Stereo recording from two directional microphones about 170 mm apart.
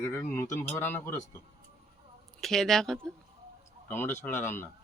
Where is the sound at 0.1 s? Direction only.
15° left (ahead or behind).